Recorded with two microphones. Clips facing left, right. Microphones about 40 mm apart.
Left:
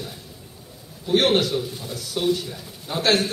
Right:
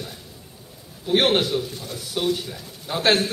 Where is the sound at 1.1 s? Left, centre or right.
Centre.